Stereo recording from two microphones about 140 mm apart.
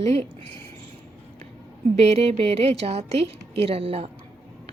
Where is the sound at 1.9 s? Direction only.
50° right (ahead or behind).